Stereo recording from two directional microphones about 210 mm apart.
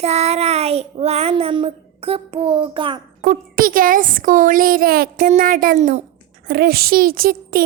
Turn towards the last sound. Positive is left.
turn(degrees=-45)  # may be behind; listen again after turning